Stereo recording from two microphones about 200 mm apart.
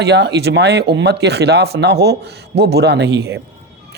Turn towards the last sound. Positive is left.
turn(degrees=-55)  # may be behind; listen again after turning